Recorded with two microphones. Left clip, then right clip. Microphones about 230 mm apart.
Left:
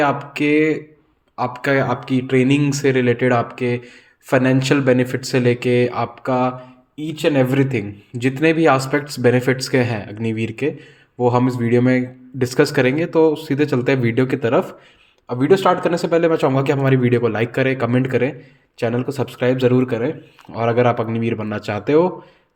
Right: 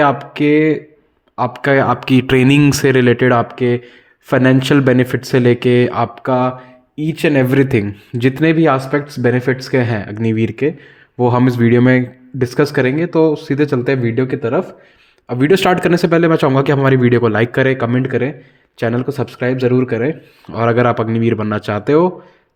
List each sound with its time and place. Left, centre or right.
0.0 s speech: right
12.4 s speech: centre
15.3 s speech: right; by 20.0 s centre
20.0 s speech: right